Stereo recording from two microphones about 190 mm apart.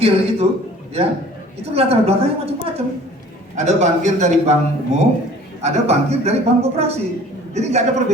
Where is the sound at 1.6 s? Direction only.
30° right (ahead or behind).